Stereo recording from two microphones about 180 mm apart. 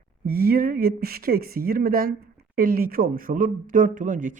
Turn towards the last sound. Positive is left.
turn(degrees=-45)  # may be behind; listen again after turning